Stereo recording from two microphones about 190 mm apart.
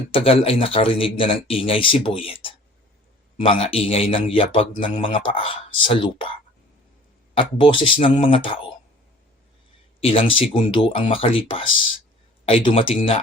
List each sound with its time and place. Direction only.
0.1 s speech: 30° left (ahead or behind)
7.3 s speech: 25° left (ahead or behind)
10.0 s speech: 30° left (ahead or behind)